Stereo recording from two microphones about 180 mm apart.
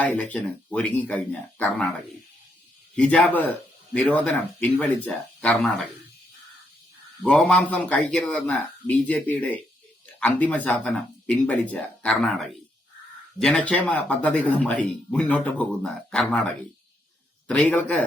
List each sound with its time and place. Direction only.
0.0 s speech: 10° left (ahead or behind)
2.9 s speech: 5° left (ahead or behind)
7.2 s speech: 5° left (ahead or behind)
17.5 s speech: 5° left (ahead or behind)